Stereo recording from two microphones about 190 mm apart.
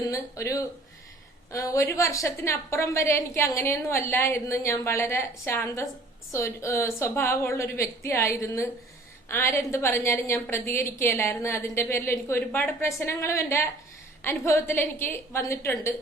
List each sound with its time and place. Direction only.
0.1 s a woman's voice: 15° left (ahead or behind)